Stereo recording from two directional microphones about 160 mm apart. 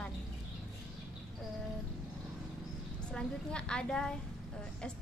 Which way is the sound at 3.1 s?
5° left (ahead or behind).